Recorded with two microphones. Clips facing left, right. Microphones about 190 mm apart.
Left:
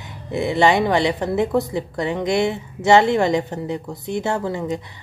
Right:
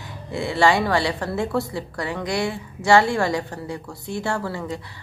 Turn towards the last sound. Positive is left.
turn(degrees=20)  # may be behind; listen again after turning